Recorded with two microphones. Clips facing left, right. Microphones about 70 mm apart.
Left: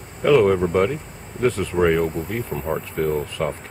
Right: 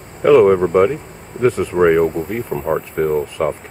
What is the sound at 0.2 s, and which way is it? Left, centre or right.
Speech, centre.